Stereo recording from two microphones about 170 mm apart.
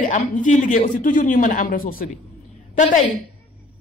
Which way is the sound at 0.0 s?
50° left (ahead or behind).